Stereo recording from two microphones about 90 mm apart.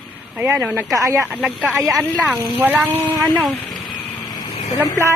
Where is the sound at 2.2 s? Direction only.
15° right (ahead or behind).